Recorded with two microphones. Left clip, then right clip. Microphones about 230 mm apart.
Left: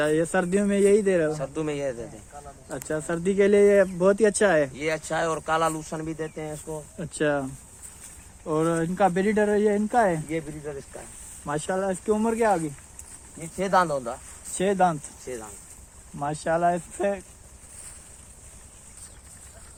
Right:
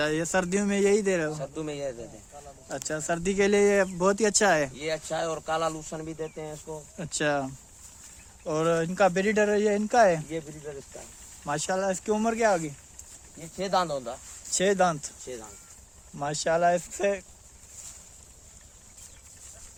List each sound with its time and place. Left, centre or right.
0.0 s speech: right
1.4 s speech: centre
2.6 s speech: right
4.7 s speech: centre
7.0 s speech: right
10.2 s speech: centre
11.4 s speech: right
13.6 s speech: centre
14.5 s speech: right
15.2 s speech: centre
16.1 s speech: right